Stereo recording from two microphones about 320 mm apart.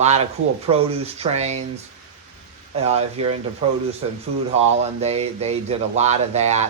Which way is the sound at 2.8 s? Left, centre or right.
Centre.